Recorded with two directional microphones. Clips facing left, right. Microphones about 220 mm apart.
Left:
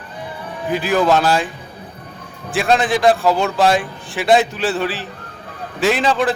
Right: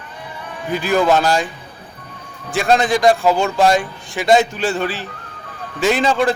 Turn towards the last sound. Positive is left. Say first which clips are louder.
# right 1 dB
turn(degrees=0)  # may be behind; listen again after turning